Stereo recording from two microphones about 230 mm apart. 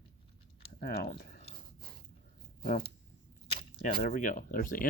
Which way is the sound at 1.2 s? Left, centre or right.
Left.